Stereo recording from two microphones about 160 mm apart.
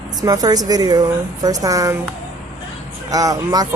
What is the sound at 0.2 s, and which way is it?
A woman's voice, 25° right (ahead or behind).